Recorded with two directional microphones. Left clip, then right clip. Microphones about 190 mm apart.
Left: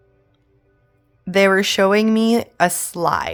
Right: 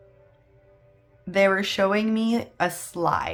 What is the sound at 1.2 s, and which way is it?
Speech, 55° left (ahead or behind).